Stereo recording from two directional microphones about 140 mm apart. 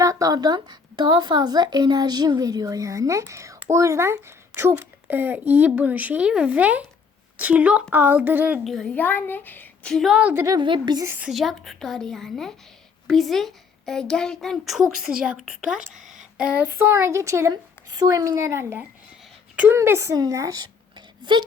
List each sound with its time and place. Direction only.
0.0 s a woman's voice: 25° right (ahead or behind)
8.6 s a child's voice: centre (ahead or behind)
9.0 s speech: 15° left (ahead or behind)
9.9 s a child's voice: centre (ahead or behind)
10.4 s a woman's voice: 30° right (ahead or behind)
11.3 s a child's voice: centre (ahead or behind); by 21.4 s 30° right (ahead or behind)